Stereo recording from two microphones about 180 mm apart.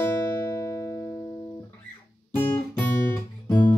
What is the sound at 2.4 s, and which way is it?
Guitar, 10° left (ahead or behind).